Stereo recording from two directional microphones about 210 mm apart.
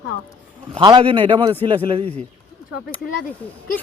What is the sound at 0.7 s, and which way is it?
A man's voice, 20° right (ahead or behind).